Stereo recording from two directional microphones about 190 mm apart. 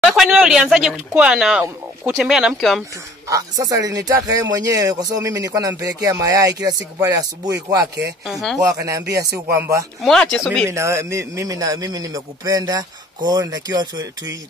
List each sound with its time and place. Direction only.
0.0 s speech: centre (ahead or behind)
3.3 s speech: 20° right (ahead or behind)
8.3 s speech: centre (ahead or behind)
8.6 s speech: 15° right (ahead or behind)
10.0 s speech: 5° left (ahead or behind)
10.7 s speech: 15° right (ahead or behind)